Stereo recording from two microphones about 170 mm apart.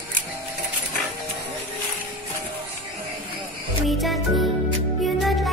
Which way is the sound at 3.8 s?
Centre (ahead or behind).